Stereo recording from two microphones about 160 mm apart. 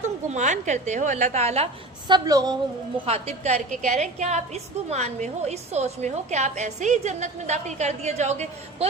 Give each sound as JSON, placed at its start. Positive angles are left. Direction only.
{"t": 0.0, "sound": "a woman's voice", "side_deg": -50}
{"t": 2.0, "sound": "speech", "side_deg": -25}
{"t": 3.1, "sound": "a woman's voice", "side_deg": -40}